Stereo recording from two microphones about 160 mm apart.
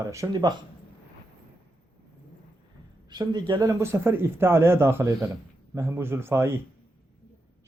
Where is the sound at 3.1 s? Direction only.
25° right (ahead or behind).